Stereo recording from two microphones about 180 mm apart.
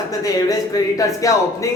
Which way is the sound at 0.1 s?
20° left (ahead or behind).